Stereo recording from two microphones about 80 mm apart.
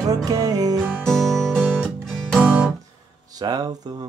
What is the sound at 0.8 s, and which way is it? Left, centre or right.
Music, centre.